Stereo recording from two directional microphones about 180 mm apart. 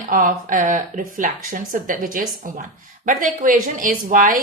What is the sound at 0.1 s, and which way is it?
Speech, 50° right (ahead or behind).